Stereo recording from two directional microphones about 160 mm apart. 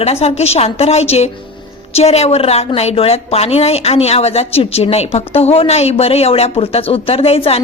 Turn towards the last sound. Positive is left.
turn(degrees=40)  # may be behind; listen again after turning